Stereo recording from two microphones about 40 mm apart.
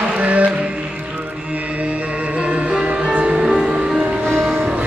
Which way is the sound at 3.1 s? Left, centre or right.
Right.